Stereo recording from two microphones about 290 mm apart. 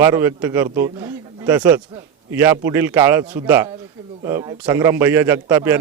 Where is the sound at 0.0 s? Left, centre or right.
Centre.